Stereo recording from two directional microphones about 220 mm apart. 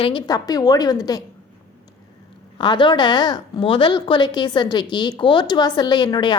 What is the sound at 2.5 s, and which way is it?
A woman's voice, 20° left (ahead or behind).